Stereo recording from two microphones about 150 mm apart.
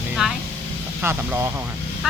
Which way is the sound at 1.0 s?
15° right (ahead or behind).